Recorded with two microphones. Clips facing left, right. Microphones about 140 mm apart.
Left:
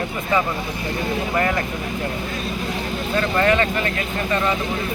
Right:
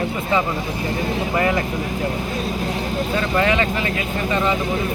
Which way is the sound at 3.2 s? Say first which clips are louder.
Left 2 dB; 10° right (ahead or behind).